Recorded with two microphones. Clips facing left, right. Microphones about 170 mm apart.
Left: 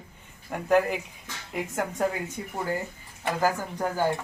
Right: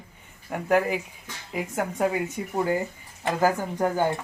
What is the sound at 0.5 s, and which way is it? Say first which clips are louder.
A woman's voice: even; 5° right (ahead or behind).